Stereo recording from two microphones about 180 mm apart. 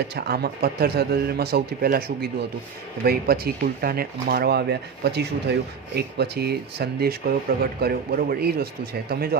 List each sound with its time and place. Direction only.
0.2 s speech: 60° right (ahead or behind)